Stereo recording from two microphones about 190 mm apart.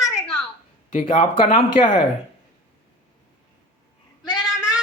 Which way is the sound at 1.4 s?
30° left (ahead or behind).